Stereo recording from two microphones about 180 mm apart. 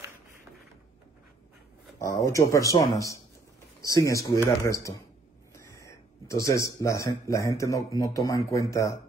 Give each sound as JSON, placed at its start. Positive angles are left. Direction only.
{"t": 2.0, "sound": "speech", "side_deg": 20}